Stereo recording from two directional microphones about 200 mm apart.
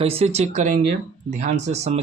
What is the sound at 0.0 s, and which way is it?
Speech, 30° right (ahead or behind).